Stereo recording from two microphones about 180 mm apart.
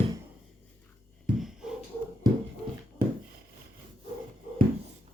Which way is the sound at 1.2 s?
5° right (ahead or behind).